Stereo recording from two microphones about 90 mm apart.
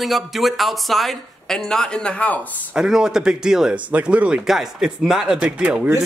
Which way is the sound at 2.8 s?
5° right (ahead or behind).